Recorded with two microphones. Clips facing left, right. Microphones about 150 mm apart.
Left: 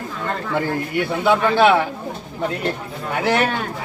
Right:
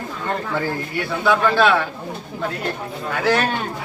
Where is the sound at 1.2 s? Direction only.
25° left (ahead or behind).